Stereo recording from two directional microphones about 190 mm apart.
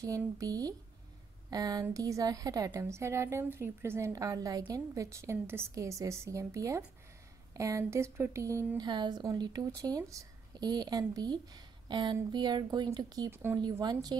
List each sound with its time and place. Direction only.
0.0 s a woman's voice: 15° right (ahead or behind)